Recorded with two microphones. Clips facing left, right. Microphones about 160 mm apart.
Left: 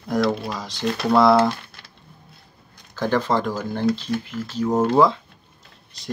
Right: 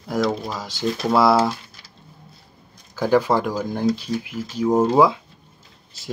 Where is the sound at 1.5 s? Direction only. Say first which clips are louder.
Left 2 dB; 60° left (ahead or behind).